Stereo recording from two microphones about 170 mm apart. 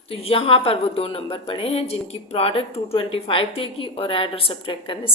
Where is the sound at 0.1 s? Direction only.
35° left (ahead or behind).